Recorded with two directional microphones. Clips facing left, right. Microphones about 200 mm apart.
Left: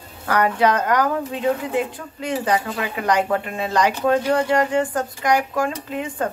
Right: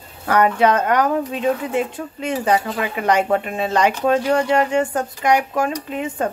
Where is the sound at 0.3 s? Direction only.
25° right (ahead or behind).